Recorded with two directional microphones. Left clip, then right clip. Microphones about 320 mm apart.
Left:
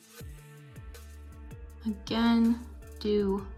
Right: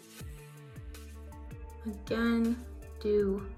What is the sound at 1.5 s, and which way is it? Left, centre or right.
Speech, centre.